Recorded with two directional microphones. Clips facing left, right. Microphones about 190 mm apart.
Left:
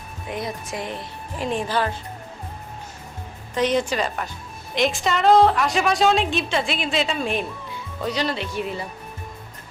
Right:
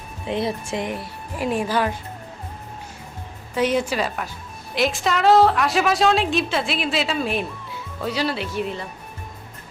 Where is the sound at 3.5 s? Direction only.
10° right (ahead or behind).